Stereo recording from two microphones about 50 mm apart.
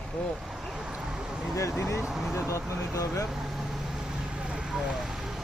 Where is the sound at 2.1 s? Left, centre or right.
Centre.